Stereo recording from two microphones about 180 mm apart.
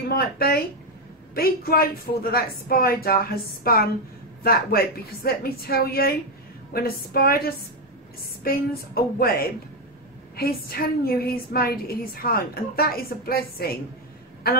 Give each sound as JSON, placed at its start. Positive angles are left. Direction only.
{"t": 0.1, "sound": "a woman's voice", "side_deg": 55}